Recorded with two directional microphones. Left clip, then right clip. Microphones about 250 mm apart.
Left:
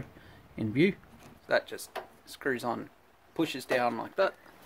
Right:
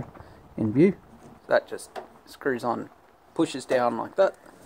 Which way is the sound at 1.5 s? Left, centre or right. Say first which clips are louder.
Right 5 dB; centre.